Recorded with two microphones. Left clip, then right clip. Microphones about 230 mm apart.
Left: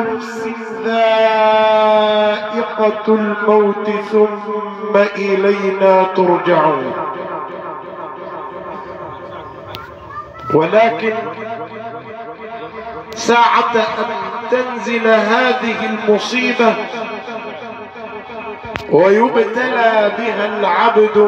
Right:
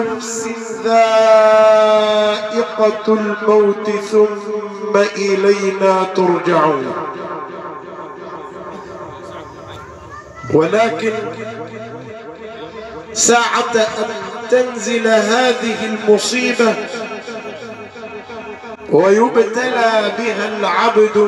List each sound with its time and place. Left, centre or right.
0.4 s a sound: centre
4.9 s a man's voice: centre
10.5 s a man's voice: centre
13.2 s a man's voice: centre
15.1 s a man's voice: centre
18.9 s a man's voice: centre